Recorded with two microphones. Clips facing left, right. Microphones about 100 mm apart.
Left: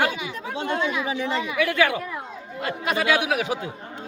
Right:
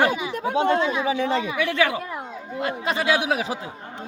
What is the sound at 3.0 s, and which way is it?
Speech, 30° right (ahead or behind).